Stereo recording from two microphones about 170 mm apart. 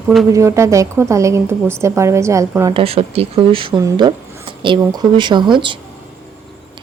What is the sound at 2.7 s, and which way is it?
Speech, 35° right (ahead or behind).